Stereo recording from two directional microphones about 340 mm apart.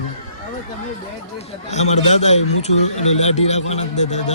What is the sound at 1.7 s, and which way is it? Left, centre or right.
A man's voice, centre.